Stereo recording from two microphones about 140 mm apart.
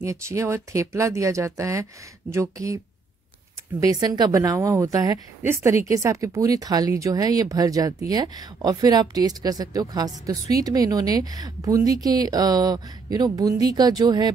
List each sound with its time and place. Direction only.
0.0 s speech: 20° right (ahead or behind)
3.8 s speech: 30° right (ahead or behind)